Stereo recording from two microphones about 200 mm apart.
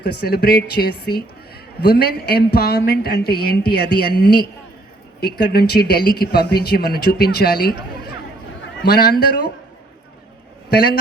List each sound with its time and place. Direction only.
0.0 s speech: 55° left (ahead or behind)
10.7 s a man's voice: 50° left (ahead or behind)